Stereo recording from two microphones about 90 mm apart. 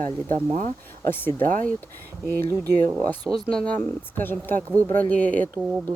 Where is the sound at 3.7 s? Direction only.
20° left (ahead or behind).